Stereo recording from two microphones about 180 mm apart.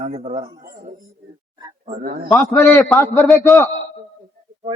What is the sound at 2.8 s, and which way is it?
Speech, centre (ahead or behind).